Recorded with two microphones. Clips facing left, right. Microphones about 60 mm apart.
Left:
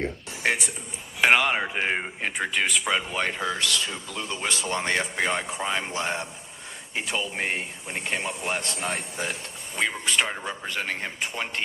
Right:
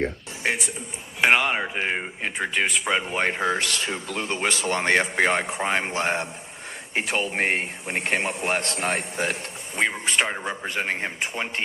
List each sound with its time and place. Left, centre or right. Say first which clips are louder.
0.4 s a man's voice: even; right
1.2 s speech: even; centre
3.2 s speech: right 4 dB; right
5.5 s speech: right 4 dB; right
9.3 s a man's voice: right 3 dB; right
11.2 s speech: right 2 dB; centre